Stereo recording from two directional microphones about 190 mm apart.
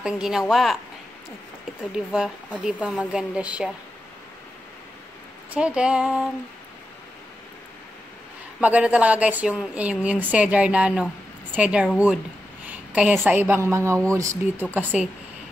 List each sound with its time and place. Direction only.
0.0 s speech: 5° right (ahead or behind)
2.0 s speech: 5° right (ahead or behind)
5.5 s speech: 5° right (ahead or behind)
8.5 s a woman's voice: 5° right (ahead or behind)